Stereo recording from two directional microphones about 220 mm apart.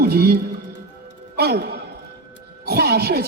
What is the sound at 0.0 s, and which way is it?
Music, 45° right (ahead or behind).